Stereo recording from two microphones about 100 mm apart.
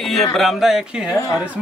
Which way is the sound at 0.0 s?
Centre (ahead or behind).